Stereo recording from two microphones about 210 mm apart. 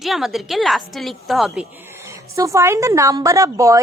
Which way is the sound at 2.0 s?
15° right (ahead or behind).